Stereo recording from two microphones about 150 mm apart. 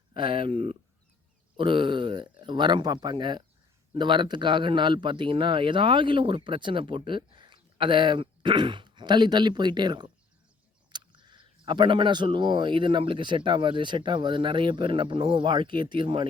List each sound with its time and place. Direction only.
0.1 s a man's voice: 35° right (ahead or behind)